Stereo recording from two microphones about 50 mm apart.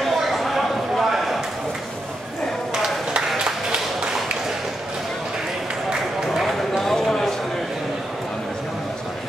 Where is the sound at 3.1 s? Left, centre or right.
Centre.